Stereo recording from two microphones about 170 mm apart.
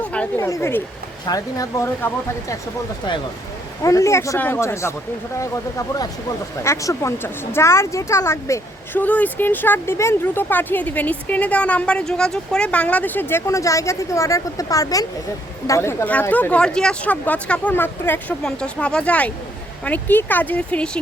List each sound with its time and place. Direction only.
0.0 s a sound: 10° left (ahead or behind)
0.4 s speech: 15° left (ahead or behind)
3.8 s speech: 15° left (ahead or behind)